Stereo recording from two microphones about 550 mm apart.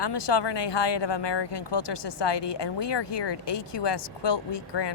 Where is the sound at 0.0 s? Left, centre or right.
Left.